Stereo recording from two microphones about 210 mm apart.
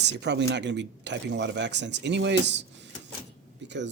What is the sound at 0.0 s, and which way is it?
Speech, 55° right (ahead or behind).